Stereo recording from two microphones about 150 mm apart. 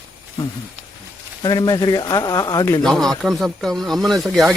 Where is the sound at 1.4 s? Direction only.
25° left (ahead or behind).